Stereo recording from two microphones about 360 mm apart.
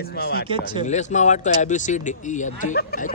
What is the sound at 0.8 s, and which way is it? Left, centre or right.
Speech, centre.